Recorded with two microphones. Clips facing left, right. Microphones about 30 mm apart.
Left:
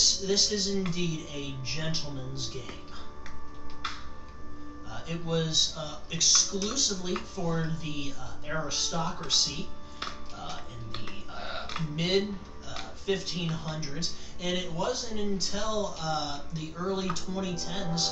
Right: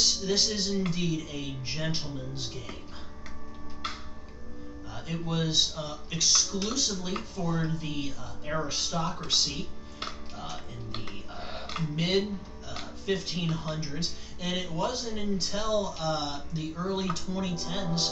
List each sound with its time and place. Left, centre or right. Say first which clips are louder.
0.0 s speech: even; centre
4.9 s speech: left 1 dB; centre
11.3 s a sound: left 3 dB; left
11.7 s speech: right 1 dB; centre